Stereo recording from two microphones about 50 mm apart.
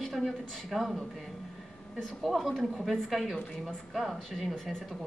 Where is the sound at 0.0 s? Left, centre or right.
Centre.